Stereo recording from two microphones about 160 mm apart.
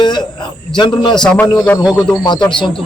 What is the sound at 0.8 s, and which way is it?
Speech, 30° left (ahead or behind).